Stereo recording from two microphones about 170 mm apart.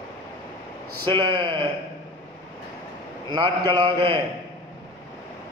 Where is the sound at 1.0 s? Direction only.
30° right (ahead or behind).